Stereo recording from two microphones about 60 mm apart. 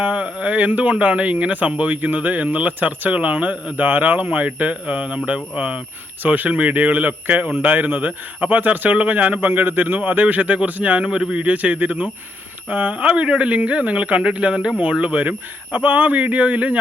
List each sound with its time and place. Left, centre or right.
0.0 s a man's voice: centre